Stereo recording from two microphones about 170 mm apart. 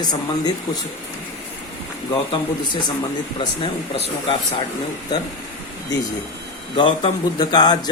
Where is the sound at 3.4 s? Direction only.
35° left (ahead or behind).